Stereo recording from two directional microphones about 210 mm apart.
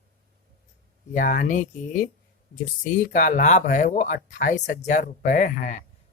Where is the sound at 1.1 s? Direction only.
40° left (ahead or behind).